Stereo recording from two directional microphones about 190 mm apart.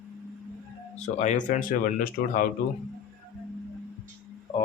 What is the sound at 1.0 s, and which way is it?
Speech, 40° left (ahead or behind).